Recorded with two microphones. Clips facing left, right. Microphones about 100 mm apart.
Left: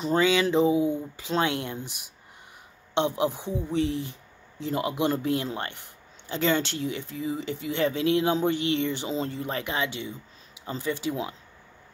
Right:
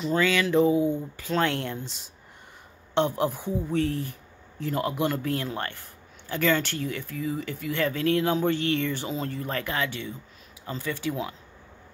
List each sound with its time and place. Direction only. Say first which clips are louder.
0.2 s speech: even; 20° left (ahead or behind)